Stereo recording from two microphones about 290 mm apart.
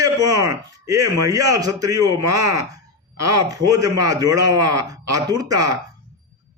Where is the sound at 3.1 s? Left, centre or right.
Right.